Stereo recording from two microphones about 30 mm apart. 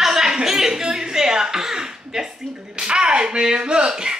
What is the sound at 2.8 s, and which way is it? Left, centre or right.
Speech, right.